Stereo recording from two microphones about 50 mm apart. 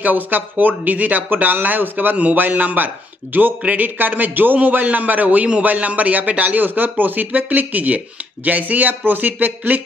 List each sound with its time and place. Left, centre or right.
0.0 s speech: right